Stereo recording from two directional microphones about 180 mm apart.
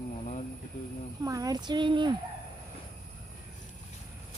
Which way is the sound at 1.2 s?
20° right (ahead or behind).